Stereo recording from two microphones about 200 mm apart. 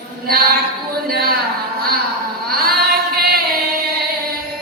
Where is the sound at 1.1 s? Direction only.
50° right (ahead or behind).